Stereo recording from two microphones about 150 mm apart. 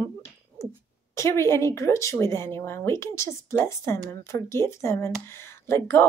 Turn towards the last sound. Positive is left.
turn(degrees=15)  # may be behind; listen again after turning